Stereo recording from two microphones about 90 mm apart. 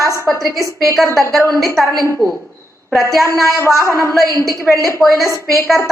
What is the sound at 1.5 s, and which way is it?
Speech, centre (ahead or behind).